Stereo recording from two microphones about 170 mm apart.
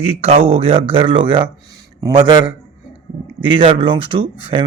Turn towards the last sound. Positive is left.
turn(degrees=-30)  # may be behind; listen again after turning